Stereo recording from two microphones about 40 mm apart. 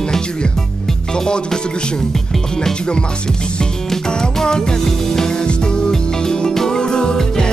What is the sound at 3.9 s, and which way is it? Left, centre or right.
Music, centre.